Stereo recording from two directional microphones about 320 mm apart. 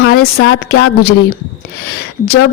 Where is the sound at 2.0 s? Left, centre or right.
Left.